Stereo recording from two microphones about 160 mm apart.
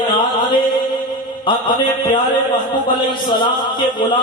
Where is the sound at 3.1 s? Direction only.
30° left (ahead or behind).